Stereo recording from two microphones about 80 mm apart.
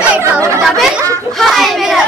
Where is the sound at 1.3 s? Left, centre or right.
Centre.